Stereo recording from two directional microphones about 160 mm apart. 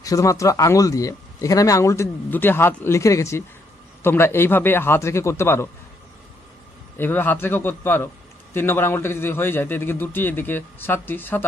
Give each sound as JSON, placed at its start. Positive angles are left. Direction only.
{"t": 0.0, "sound": "a man's voice", "side_deg": 20}
{"t": 7.0, "sound": "a man's voice", "side_deg": 10}